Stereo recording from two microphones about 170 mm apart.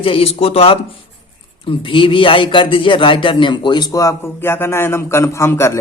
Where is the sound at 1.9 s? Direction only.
30° left (ahead or behind).